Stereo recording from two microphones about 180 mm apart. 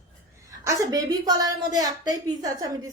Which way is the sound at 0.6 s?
20° right (ahead or behind).